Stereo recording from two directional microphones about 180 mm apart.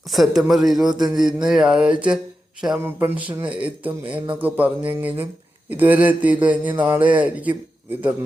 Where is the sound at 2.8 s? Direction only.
10° right (ahead or behind).